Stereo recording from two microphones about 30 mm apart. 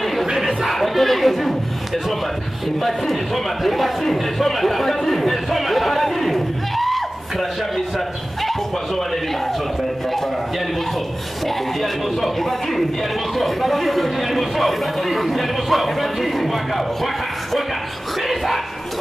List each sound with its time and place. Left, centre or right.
0.0 s a sound: centre
0.7 s speech: centre
3.6 s speech: centre
11.4 s speech: centre